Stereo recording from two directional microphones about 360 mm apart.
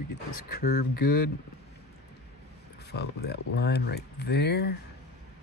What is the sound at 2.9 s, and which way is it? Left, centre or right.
Speech, left.